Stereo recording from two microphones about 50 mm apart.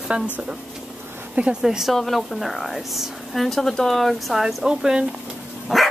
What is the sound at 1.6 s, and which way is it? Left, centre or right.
Speech, centre.